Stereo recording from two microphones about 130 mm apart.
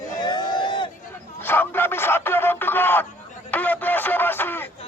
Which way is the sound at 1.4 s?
15° left (ahead or behind).